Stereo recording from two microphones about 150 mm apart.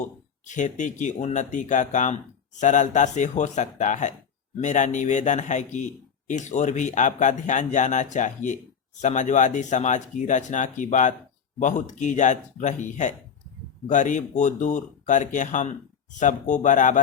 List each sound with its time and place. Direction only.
0.4 s speech: 55° left (ahead or behind)